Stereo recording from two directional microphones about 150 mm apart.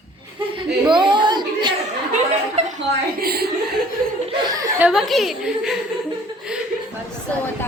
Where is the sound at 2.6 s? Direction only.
50° right (ahead or behind).